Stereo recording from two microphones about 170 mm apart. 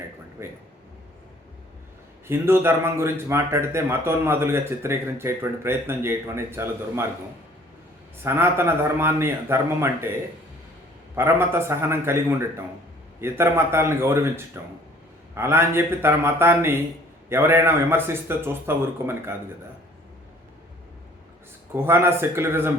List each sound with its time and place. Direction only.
0.4 s a man's voice: 15° right (ahead or behind)
2.2 s a man's voice: 15° right (ahead or behind)
8.2 s a man's voice: 15° right (ahead or behind)
11.1 s a man's voice: 15° right (ahead or behind)
21.8 s a man's voice: 15° right (ahead or behind)